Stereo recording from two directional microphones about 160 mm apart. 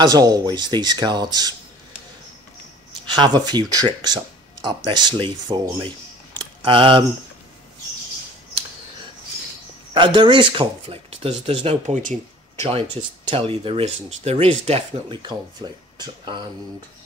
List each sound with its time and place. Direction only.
0.0 s speech: 25° right (ahead or behind)
3.1 s speech: 30° right (ahead or behind)
9.9 s speech: 30° right (ahead or behind); by 12.6 s 50° right (ahead or behind)
12.6 s speech: 35° right (ahead or behind)
15.2 s speech: 25° right (ahead or behind)